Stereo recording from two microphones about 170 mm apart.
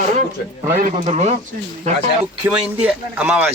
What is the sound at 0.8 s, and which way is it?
Speech, 45° right (ahead or behind).